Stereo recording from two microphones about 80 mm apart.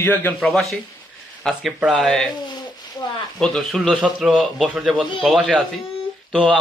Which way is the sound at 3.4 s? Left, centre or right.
Centre.